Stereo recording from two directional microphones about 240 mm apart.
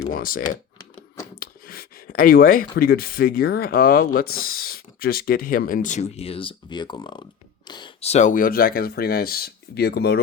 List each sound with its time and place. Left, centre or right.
0.1 s speech: left